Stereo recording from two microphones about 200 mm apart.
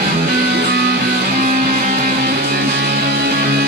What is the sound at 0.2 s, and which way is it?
Music, 50° right (ahead or behind).